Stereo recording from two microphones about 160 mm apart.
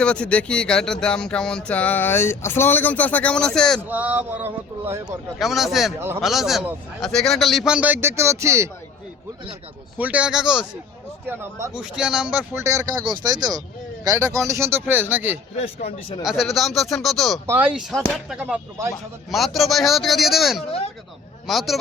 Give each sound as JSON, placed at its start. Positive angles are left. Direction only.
{"t": 0.0, "sound": "speech", "side_deg": 5}
{"t": 3.8, "sound": "speech", "side_deg": -10}
{"t": 5.4, "sound": "a man's voice", "side_deg": 0}
{"t": 10.0, "sound": "a man's voice", "side_deg": -10}
{"t": 17.4, "sound": "a man's voice", "side_deg": -15}